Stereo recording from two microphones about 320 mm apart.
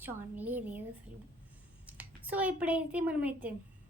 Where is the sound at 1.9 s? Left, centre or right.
Centre.